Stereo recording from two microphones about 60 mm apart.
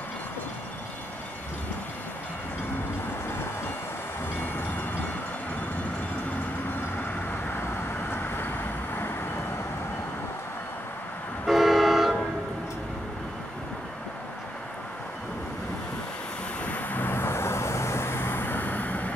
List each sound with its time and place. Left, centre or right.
8.1 s vehicle: left
11.4 s vehicle: centre
16.6 s vehicle: left